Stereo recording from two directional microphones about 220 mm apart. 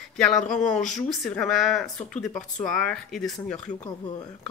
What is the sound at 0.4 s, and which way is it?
Speech, 35° left (ahead or behind).